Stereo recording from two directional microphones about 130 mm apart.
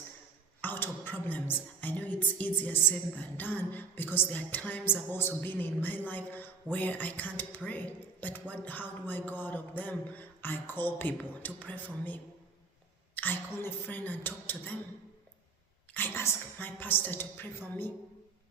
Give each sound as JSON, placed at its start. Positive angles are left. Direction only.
{"t": 0.6, "sound": "music", "side_deg": 15}
{"t": 16.0, "sound": "music", "side_deg": 15}